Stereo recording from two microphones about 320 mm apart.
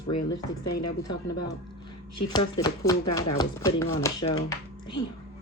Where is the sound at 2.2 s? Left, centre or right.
Centre.